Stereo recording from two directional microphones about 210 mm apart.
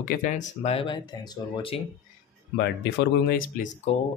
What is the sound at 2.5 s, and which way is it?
Speech, 55° left (ahead or behind).